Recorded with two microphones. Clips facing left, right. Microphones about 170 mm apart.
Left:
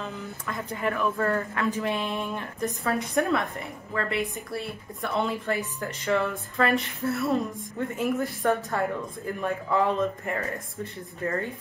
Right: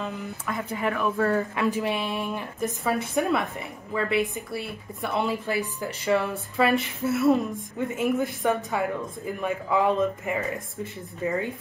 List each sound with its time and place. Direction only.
0.0 s speech: 15° right (ahead or behind)
0.5 s speech: 5° right (ahead or behind)